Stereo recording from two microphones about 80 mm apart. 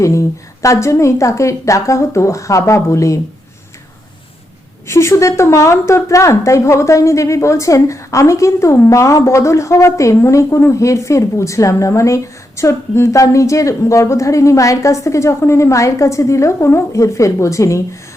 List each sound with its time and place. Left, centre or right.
0.0 s speech: left
4.9 s speech: left